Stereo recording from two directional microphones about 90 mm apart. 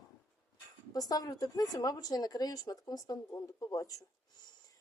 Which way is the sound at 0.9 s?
45° left (ahead or behind).